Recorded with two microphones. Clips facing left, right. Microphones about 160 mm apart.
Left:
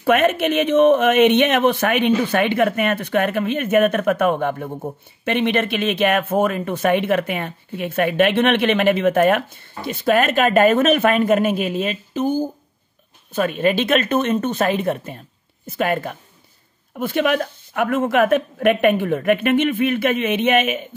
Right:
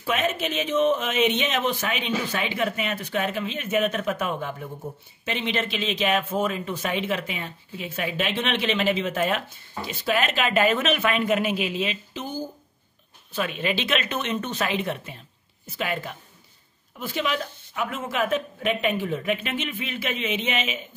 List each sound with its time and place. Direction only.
0.0 s speech: 60° left (ahead or behind)